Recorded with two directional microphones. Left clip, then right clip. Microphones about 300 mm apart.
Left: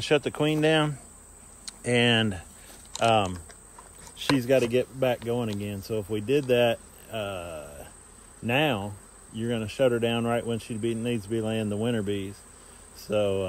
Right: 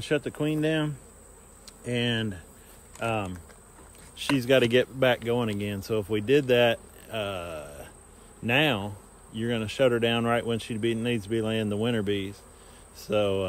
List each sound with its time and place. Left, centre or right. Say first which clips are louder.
0.0 s speech: left 4 dB; left
4.2 s speech: right 1 dB; centre